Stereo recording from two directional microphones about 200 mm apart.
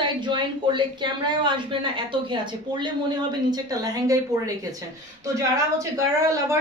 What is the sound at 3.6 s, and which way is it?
Speech, 20° right (ahead or behind).